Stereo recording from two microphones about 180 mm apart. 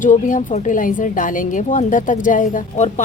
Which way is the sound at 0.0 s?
45° left (ahead or behind).